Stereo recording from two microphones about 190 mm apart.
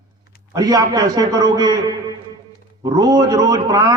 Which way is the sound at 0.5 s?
20° right (ahead or behind).